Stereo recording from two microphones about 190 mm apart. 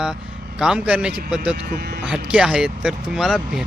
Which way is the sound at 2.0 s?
5° right (ahead or behind).